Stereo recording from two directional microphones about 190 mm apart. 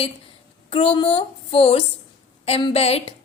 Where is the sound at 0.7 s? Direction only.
30° left (ahead or behind).